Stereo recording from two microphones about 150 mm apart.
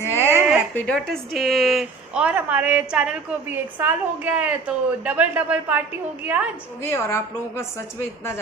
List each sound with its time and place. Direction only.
0.0 s a sound: 15° left (ahead or behind)
0.7 s a woman's voice: 5° left (ahead or behind); by 6.5 s 10° right (ahead or behind)
6.8 s a woman's voice: 20° left (ahead or behind)